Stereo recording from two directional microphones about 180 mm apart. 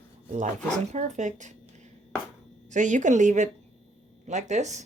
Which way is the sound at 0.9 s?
40° right (ahead or behind).